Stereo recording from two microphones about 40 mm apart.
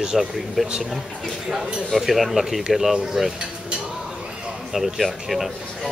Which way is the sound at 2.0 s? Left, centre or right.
Centre.